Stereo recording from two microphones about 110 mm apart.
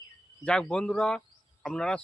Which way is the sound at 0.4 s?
10° left (ahead or behind).